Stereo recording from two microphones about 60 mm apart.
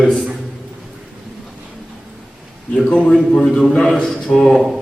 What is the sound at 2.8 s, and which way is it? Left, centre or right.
Speech, centre.